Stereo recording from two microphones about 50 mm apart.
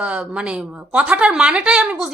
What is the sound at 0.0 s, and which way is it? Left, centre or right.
A woman's voice, right.